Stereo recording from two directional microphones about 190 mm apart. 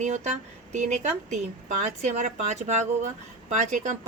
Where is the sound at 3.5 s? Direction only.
40° right (ahead or behind).